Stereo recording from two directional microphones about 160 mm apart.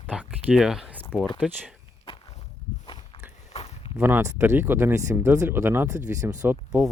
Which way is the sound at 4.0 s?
15° right (ahead or behind).